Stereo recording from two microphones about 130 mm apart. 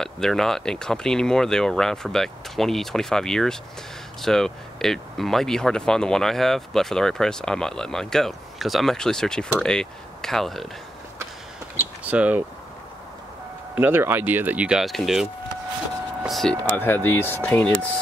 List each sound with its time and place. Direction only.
0.0 s speech: 5° left (ahead or behind)
11.7 s speech: 15° right (ahead or behind)
13.7 s speech: 15° right (ahead or behind); by 15.2 s centre (ahead or behind)
16.3 s speech: 5° left (ahead or behind)
16.7 s speech: 15° left (ahead or behind)